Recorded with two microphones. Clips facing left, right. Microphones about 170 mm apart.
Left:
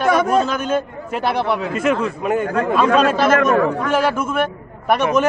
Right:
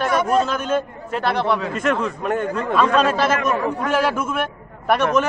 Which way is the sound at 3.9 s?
5° right (ahead or behind).